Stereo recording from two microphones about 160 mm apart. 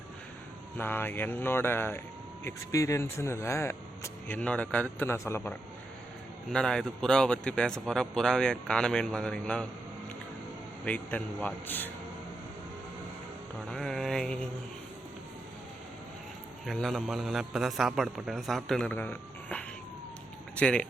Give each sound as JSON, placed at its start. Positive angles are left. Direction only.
{"t": 0.8, "sound": "speech", "side_deg": 10}
{"t": 10.8, "sound": "speech", "side_deg": 10}
{"t": 13.7, "sound": "speech", "side_deg": 0}
{"t": 16.6, "sound": "speech", "side_deg": 0}